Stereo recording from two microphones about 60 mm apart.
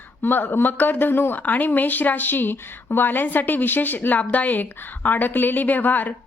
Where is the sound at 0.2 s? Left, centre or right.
Left.